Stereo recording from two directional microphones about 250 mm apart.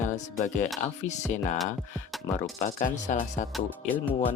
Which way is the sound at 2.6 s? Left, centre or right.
Left.